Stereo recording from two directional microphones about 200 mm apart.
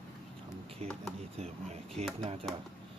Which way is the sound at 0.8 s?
35° right (ahead or behind).